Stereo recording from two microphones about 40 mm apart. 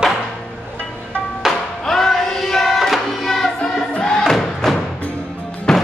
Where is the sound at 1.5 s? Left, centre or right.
Centre.